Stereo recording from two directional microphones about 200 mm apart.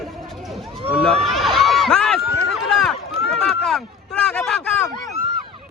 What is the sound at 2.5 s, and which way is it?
Run, centre (ahead or behind).